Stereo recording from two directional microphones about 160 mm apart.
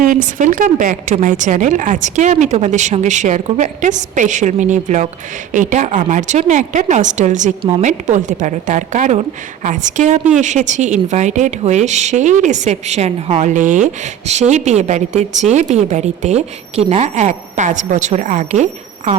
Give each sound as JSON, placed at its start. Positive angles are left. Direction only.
{"t": 0.0, "sound": "speech", "side_deg": -55}
{"t": 7.6, "sound": "a woman's voice", "side_deg": -35}
{"t": 7.9, "sound": "speech", "side_deg": -50}